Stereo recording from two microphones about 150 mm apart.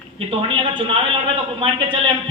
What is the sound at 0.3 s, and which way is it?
A man's voice, 35° right (ahead or behind).